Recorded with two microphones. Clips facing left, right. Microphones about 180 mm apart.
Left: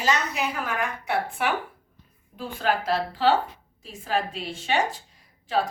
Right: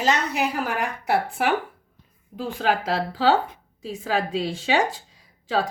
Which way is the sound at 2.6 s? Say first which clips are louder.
Right 1 dB; 90° right.